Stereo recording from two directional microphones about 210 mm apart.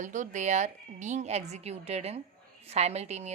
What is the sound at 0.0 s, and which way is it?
A woman's voice, 35° right (ahead or behind).